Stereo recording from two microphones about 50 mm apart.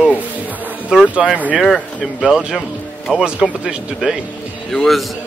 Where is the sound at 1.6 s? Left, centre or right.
Centre.